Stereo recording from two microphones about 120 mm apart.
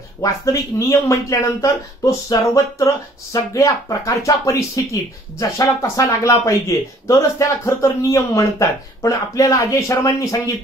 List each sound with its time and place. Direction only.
0.2 s speech: 30° left (ahead or behind)